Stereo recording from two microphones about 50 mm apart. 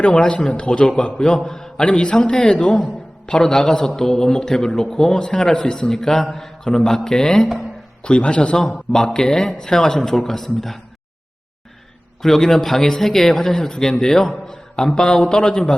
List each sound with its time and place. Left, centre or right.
0.0 s a man's voice: centre
12.2 s a man's voice: centre